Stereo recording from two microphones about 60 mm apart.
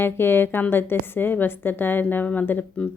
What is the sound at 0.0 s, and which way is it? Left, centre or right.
A woman's voice, left.